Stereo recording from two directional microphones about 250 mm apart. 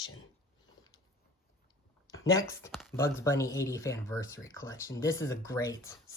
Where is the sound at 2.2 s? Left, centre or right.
Centre.